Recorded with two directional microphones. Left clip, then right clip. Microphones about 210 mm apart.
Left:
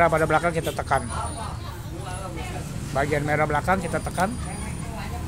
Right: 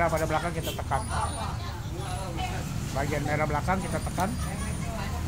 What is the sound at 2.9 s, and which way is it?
Speech, 45° left (ahead or behind).